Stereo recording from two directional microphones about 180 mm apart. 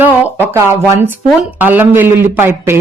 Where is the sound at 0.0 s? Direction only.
10° right (ahead or behind).